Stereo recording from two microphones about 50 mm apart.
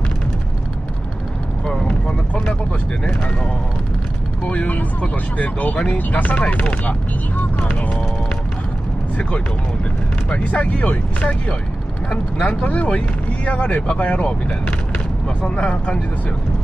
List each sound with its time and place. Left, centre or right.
1.7 s vehicle: left
4.5 s speech: left
6.3 s speech: left
7.3 s speech: left
10.3 s speech: left